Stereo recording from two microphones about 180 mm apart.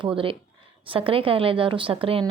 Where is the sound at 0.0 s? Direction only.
30° right (ahead or behind).